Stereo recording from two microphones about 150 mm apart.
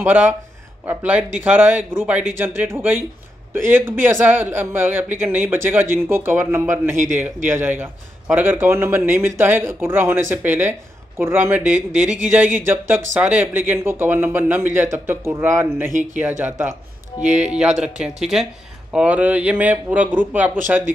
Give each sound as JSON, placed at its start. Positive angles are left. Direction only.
{"t": 0.0, "sound": "a man's voice", "side_deg": -10}
{"t": 15.9, "sound": "speech", "side_deg": -60}
{"t": 16.2, "sound": "a man's voice", "side_deg": -10}